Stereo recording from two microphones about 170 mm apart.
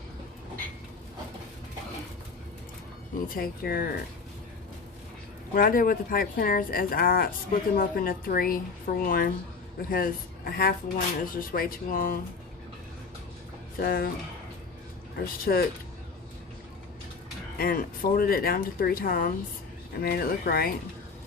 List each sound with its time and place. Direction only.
3.2 s speech: 60° left (ahead or behind)
5.5 s speech: 55° left (ahead or behind)
13.7 s speech: 60° left (ahead or behind)
15.2 s speech: 60° left (ahead or behind)
17.6 s speech: 60° left (ahead or behind)